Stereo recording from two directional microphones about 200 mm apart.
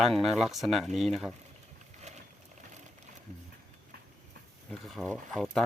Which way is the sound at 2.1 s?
35° right (ahead or behind).